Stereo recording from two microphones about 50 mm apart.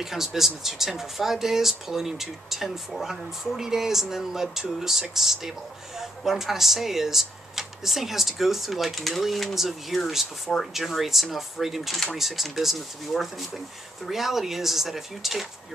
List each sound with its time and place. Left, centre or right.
0.0 s speech: centre